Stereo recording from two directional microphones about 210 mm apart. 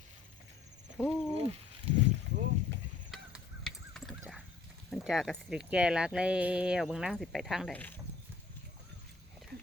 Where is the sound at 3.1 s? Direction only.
Centre (ahead or behind).